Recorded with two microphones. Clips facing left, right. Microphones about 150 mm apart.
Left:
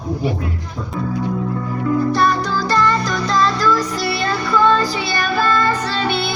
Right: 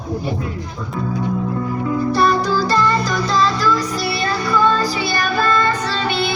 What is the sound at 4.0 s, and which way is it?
Music, 25° left (ahead or behind).